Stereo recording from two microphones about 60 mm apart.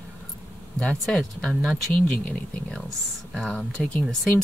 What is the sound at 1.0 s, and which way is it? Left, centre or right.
Speech, centre.